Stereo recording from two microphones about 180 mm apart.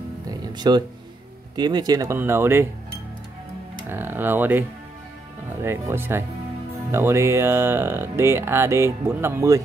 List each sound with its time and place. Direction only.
0.3 s music: 25° right (ahead or behind)
1.6 s speech: 20° right (ahead or behind)
3.9 s speech: 10° right (ahead or behind)